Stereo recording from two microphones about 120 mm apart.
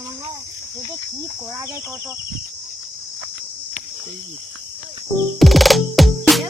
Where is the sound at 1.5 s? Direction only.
20° right (ahead or behind).